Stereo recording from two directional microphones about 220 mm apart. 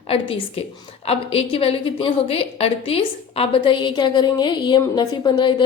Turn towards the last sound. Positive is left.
turn(degrees=20)  # may be behind; listen again after turning